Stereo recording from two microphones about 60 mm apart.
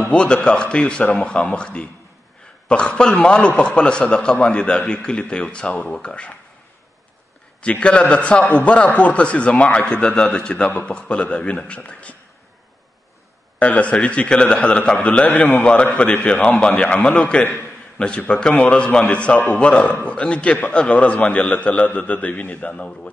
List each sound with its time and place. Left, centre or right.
0.1 s a man's voice: centre
7.6 s a man's voice: centre
13.6 s a man's voice: left
15.6 s a man's voice: left